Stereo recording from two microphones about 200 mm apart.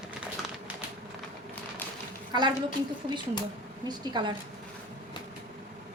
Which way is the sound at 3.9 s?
20° right (ahead or behind).